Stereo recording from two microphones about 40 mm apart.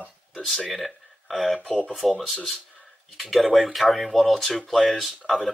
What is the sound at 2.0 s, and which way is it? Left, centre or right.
Speech, centre.